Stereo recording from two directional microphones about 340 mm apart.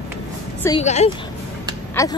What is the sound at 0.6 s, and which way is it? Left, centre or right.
Speech, centre.